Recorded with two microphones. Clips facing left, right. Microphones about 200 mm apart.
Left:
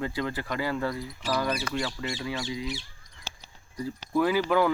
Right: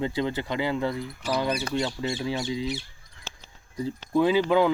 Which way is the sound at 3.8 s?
20° right (ahead or behind).